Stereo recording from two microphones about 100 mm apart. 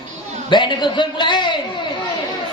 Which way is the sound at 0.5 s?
50° left (ahead or behind).